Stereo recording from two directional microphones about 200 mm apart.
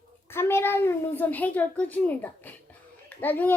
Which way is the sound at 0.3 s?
10° left (ahead or behind).